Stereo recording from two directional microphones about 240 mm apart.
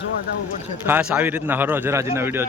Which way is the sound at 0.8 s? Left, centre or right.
Centre.